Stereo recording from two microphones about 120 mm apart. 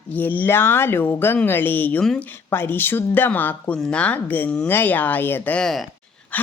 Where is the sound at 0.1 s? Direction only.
15° left (ahead or behind).